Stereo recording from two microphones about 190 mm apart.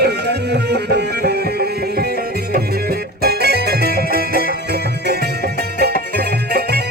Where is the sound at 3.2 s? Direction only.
55° right (ahead or behind).